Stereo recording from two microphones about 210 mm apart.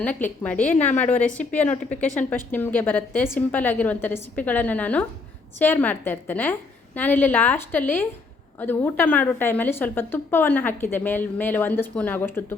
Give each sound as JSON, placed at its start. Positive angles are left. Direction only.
{"t": 0.0, "sound": "a woman's voice", "side_deg": 10}
{"t": 0.7, "sound": "a woman's voice", "side_deg": 35}
{"t": 0.9, "sound": "a woman's voice", "side_deg": 5}